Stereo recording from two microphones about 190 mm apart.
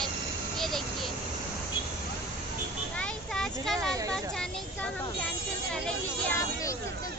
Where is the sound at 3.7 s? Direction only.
15° right (ahead or behind).